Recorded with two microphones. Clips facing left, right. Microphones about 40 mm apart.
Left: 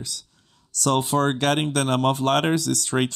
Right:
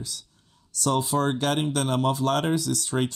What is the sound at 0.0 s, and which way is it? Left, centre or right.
Speech, left.